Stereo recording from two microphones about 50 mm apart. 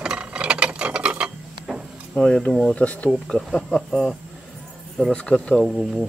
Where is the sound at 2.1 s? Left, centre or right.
Centre.